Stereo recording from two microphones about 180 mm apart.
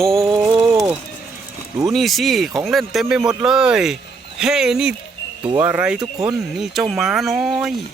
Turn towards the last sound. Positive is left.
turn(degrees=0)  # may be behind; listen again after turning